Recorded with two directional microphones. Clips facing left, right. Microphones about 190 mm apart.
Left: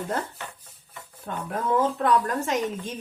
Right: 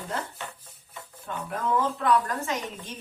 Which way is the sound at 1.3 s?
45° left (ahead or behind).